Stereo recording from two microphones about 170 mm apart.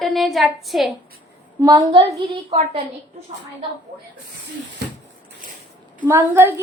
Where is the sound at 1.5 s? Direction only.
25° right (ahead or behind).